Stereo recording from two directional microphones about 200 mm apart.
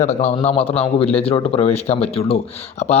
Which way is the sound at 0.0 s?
30° left (ahead or behind).